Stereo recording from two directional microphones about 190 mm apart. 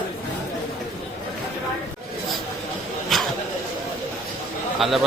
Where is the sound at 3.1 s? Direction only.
Centre (ahead or behind).